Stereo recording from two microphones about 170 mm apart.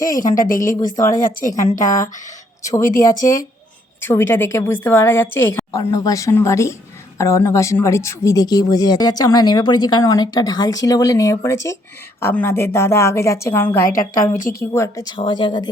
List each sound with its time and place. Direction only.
0.0 s speech: 20° left (ahead or behind)
0.3 s speech: 55° left (ahead or behind)
0.8 s speech: 20° left (ahead or behind)
1.2 s speech: 55° left (ahead or behind)
4.0 s a woman's voice: 15° left (ahead or behind)
14.3 s speech: 55° left (ahead or behind)
14.6 s a woman's voice: 15° left (ahead or behind)